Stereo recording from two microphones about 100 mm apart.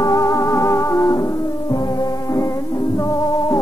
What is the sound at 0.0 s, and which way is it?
Music, 35° left (ahead or behind).